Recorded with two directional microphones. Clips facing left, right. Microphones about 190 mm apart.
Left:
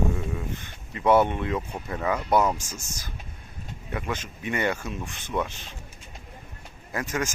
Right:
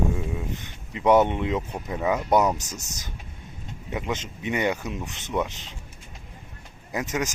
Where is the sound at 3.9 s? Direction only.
20° right (ahead or behind).